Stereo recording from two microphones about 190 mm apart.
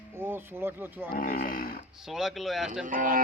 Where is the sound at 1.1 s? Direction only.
50° left (ahead or behind).